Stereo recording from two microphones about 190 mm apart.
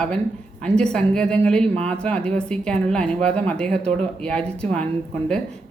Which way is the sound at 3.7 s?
35° right (ahead or behind).